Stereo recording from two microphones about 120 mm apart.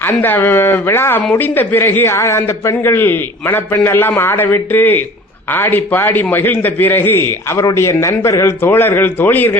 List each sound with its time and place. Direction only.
0.0 s a man's voice: 15° left (ahead or behind)